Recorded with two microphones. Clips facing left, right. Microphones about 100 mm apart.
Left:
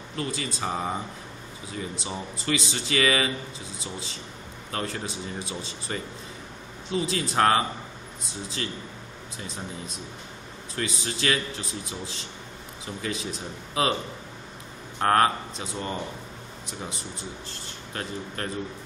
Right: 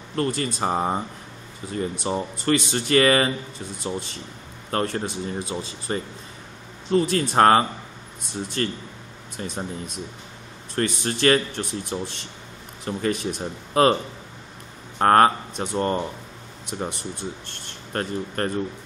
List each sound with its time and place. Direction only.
0.1 s speech: 50° right (ahead or behind)
6.9 s speech: 50° right (ahead or behind)
10.8 s speech: 50° right (ahead or behind)
11.5 s speech: 65° right (ahead or behind)
13.0 s speech: 60° right (ahead or behind)
13.4 s speech: 45° right (ahead or behind)
15.0 s speech: 45° right (ahead or behind)
15.5 s speech: 60° right (ahead or behind)